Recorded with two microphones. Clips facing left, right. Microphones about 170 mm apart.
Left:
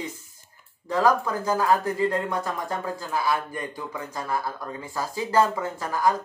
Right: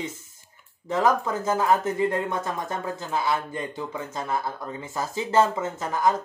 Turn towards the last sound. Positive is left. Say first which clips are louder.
# even
turn(degrees=-20)  # may be behind; listen again after turning